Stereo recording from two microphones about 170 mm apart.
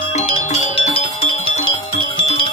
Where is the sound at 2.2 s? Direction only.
35° left (ahead or behind).